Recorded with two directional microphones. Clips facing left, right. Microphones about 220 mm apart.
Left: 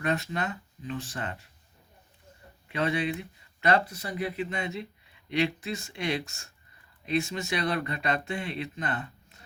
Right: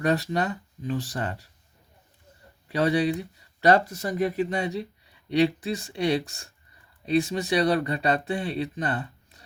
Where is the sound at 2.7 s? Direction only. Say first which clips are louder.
Right 6 dB; 35° right (ahead or behind).